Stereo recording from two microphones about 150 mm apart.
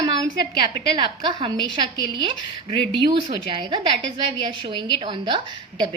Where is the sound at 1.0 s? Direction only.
30° right (ahead or behind).